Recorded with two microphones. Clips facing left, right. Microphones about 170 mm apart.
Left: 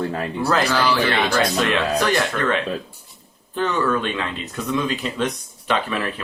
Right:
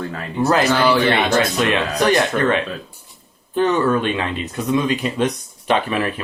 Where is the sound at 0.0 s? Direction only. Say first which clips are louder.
Left 3 dB; 30° left (ahead or behind).